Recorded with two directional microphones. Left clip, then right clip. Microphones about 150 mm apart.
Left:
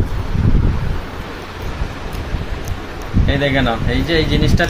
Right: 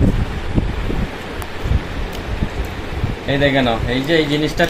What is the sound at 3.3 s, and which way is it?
Speech, 15° right (ahead or behind).